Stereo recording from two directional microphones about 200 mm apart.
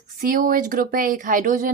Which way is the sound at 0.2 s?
45° right (ahead or behind).